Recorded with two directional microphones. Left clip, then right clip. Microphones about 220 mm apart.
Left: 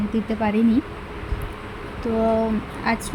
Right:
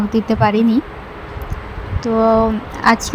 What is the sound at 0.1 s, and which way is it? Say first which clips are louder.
Speech: right 10 dB; 10° right (ahead or behind).